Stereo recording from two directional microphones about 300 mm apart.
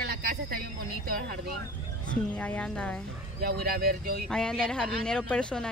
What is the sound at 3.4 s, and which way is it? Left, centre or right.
Speech, right.